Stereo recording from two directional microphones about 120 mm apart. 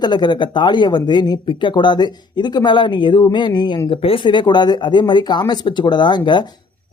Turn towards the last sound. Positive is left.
turn(degrees=40)  # may be behind; listen again after turning